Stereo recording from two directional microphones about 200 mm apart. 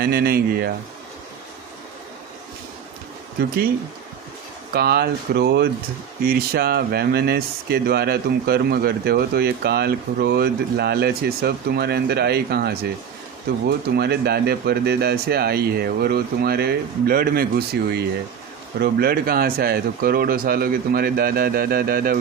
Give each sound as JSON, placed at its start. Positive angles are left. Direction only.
{"t": 0.0, "sound": "speech", "side_deg": -50}
{"t": 3.4, "sound": "speech", "side_deg": -55}
{"t": 4.7, "sound": "speech", "side_deg": -50}